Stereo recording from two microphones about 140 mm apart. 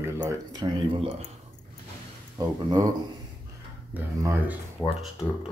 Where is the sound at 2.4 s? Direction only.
30° right (ahead or behind).